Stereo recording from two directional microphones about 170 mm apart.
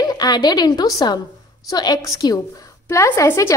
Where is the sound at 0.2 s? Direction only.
25° left (ahead or behind).